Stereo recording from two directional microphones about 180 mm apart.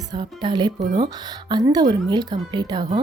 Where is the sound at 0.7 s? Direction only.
40° right (ahead or behind).